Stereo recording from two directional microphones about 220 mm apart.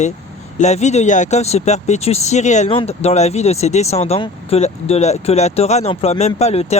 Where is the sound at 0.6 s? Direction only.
30° left (ahead or behind).